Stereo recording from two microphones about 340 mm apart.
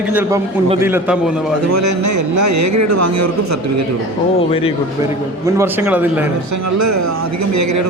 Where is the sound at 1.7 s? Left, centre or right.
Right.